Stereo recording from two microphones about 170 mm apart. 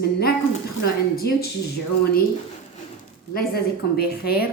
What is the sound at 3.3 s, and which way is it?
Speech, 65° left (ahead or behind).